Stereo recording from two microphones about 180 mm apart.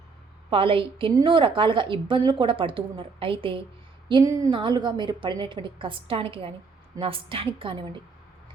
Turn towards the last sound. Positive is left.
turn(degrees=-30)  # may be behind; listen again after turning